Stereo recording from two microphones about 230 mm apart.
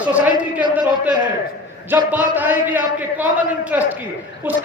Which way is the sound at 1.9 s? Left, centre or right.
Centre.